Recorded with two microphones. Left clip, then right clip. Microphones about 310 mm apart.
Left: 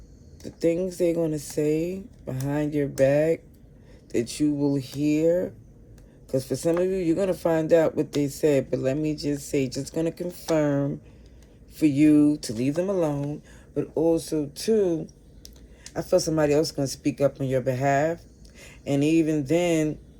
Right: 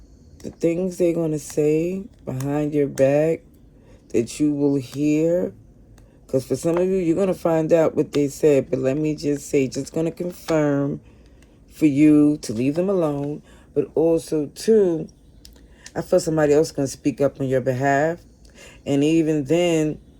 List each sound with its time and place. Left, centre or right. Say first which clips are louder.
0.4 s speech: right 2 dB; centre